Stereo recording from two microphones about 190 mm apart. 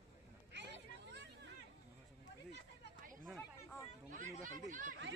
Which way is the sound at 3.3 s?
10° left (ahead or behind).